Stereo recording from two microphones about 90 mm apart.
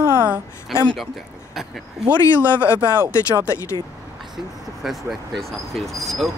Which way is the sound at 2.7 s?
30° left (ahead or behind).